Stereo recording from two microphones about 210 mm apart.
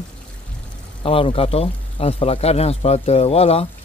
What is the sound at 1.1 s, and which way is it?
Speech, 25° left (ahead or behind).